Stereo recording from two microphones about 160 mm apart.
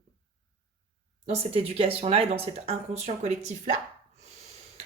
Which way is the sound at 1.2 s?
40° right (ahead or behind).